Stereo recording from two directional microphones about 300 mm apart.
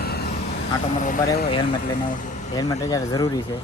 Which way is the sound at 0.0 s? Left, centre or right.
Left.